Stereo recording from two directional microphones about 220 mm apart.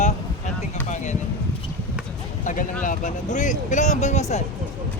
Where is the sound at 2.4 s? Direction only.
35° left (ahead or behind).